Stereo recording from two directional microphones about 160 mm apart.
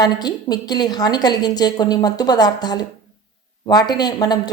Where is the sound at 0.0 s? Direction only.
25° left (ahead or behind).